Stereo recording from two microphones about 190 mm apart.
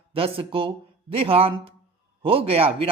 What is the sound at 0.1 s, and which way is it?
Speech, 30° right (ahead or behind).